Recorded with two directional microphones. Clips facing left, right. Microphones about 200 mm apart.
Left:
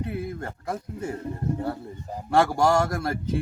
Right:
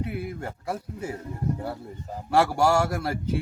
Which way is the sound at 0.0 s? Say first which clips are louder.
Left 1 dB; 10° right (ahead or behind).